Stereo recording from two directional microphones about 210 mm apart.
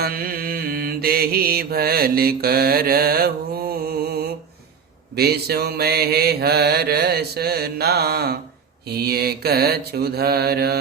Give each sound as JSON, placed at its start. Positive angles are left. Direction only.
{"t": 0.0, "sound": "mantra", "side_deg": -45}